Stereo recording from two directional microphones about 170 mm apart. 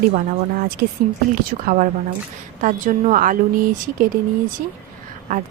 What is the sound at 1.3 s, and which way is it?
Speech, 50° right (ahead or behind).